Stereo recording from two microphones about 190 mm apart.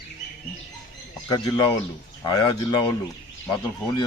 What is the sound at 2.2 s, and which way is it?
Speech, 25° left (ahead or behind).